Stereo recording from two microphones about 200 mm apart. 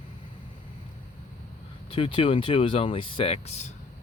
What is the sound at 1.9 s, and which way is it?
Speech, 25° left (ahead or behind).